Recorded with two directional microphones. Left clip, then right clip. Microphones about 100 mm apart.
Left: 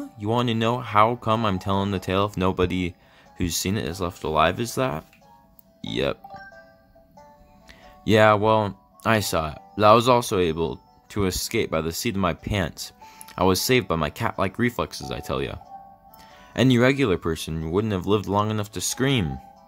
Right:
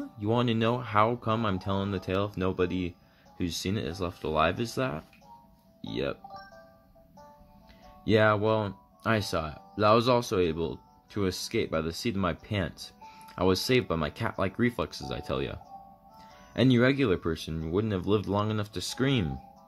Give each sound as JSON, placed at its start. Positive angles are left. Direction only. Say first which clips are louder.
{"t": 0.2, "sound": "speech", "louder": "left 4 dB", "side_deg": 20}
{"t": 7.8, "sound": "speech", "louder": "left 7 dB", "side_deg": 40}